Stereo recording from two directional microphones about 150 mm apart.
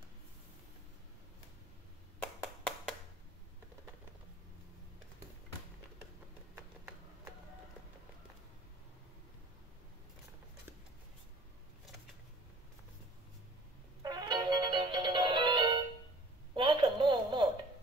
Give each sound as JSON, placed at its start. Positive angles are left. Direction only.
{"t": 2.6, "sound": "a sound", "side_deg": 5}
{"t": 14.0, "sound": "music", "side_deg": -30}
{"t": 16.5, "sound": "telephone", "side_deg": -30}